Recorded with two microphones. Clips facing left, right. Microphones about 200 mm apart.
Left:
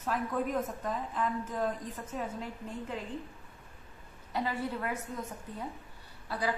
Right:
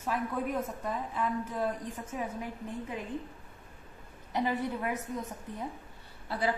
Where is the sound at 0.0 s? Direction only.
5° right (ahead or behind).